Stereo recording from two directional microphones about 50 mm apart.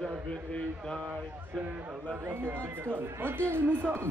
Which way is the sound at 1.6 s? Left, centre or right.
Right.